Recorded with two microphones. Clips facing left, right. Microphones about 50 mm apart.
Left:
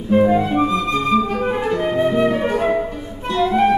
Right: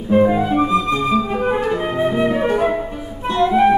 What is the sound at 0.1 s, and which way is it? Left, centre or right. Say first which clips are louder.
Music: even; centre.